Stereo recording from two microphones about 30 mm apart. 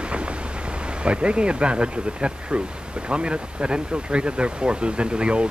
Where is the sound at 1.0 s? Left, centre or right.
Right.